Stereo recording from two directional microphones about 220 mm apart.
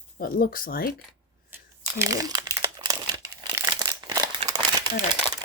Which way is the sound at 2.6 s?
20° right (ahead or behind).